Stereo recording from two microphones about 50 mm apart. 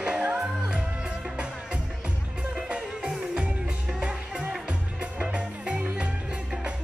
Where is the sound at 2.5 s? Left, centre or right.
Centre.